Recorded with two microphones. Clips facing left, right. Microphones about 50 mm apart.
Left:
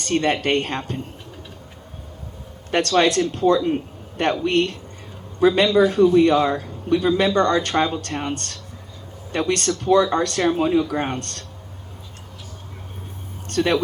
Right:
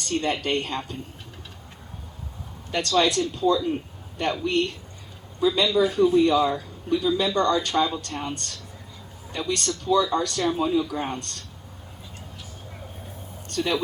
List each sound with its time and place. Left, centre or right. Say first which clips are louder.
0.0 s speech: left 5 dB; left
2.7 s speech: left 4 dB; left
13.5 s speech: left 6 dB; left